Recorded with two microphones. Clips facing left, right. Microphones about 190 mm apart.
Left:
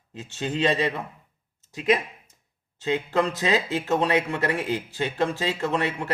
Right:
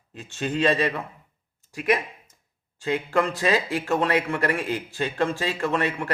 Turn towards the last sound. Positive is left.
turn(degrees=20)  # may be behind; listen again after turning